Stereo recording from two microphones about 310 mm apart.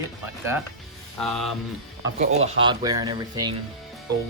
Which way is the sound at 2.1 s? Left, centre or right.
Right.